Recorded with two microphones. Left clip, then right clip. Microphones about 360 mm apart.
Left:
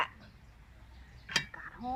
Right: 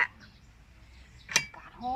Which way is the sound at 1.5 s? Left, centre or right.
Centre.